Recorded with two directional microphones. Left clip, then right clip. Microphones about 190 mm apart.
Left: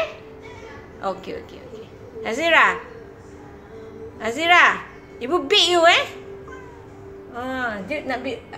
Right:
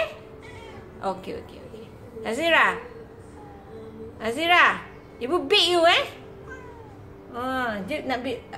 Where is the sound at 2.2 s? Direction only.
Centre (ahead or behind).